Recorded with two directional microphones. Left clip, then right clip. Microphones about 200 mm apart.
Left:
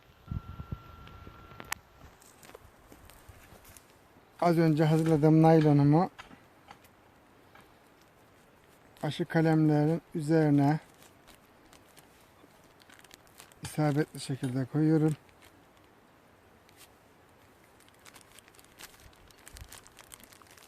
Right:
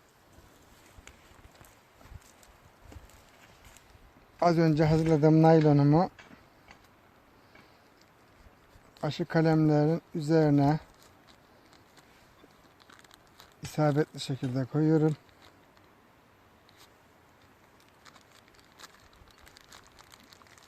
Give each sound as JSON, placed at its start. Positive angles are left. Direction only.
{"t": 4.4, "sound": "speech", "side_deg": -25}
{"t": 9.0, "sound": "speech", "side_deg": -30}
{"t": 13.7, "sound": "speech", "side_deg": -30}
{"t": 18.8, "sound": "a sound", "side_deg": 5}
{"t": 19.5, "sound": "crumpling", "side_deg": 5}